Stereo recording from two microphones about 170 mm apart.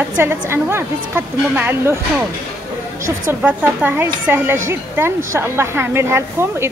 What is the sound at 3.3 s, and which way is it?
A woman's voice, 10° right (ahead or behind).